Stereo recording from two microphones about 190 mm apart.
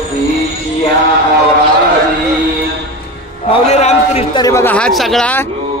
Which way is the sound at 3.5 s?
35° left (ahead or behind).